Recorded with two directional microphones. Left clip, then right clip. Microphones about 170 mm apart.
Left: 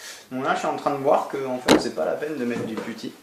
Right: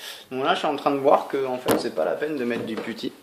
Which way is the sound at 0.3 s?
40° right (ahead or behind).